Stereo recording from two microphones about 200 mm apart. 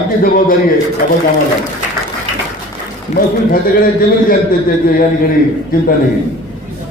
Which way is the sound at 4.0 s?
45° left (ahead or behind).